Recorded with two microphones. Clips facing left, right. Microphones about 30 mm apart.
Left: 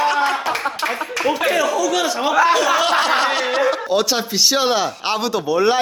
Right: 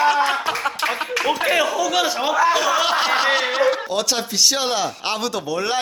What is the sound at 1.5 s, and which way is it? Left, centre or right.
Speech, right.